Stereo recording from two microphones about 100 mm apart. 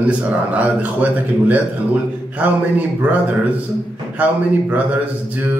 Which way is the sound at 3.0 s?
15° right (ahead or behind).